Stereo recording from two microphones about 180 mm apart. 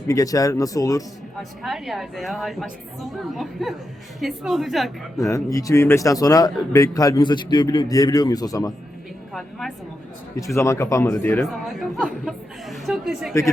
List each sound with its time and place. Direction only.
0.1 s speech: 20° left (ahead or behind)
1.4 s a woman's voice: centre (ahead or behind)
5.2 s speech: 20° left (ahead or behind)
9.3 s a woman's voice: centre (ahead or behind)
10.3 s speech: 15° left (ahead or behind)
11.4 s a woman's voice: centre (ahead or behind)